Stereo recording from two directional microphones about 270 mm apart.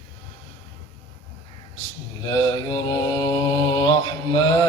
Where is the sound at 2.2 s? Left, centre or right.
Centre.